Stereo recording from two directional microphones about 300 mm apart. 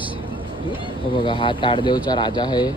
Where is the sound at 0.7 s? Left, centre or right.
Centre.